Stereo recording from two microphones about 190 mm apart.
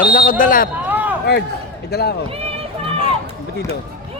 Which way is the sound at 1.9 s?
55° left (ahead or behind).